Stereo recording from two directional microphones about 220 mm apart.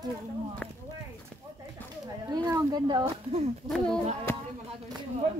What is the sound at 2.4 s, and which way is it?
Speech, 15° right (ahead or behind).